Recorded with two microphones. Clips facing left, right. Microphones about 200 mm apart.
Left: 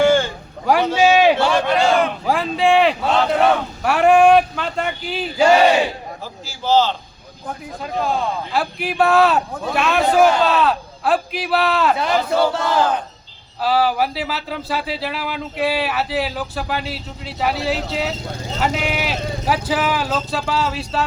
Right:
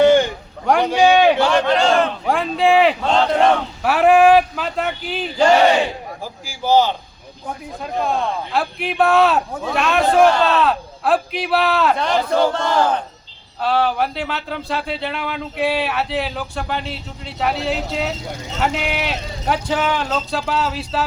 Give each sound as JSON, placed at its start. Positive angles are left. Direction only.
{"t": 0.0, "sound": "a sound", "side_deg": -20}
{"t": 0.6, "sound": "a man's voice", "side_deg": 0}
{"t": 6.4, "sound": "a man's voice", "side_deg": -15}
{"t": 7.4, "sound": "speech", "side_deg": 0}